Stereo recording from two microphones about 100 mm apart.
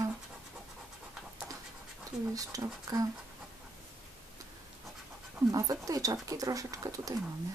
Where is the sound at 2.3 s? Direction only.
35° right (ahead or behind).